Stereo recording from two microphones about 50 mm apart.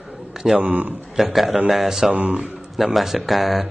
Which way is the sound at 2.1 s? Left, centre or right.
Right.